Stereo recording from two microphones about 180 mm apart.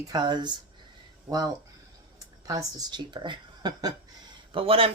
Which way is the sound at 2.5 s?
25° right (ahead or behind).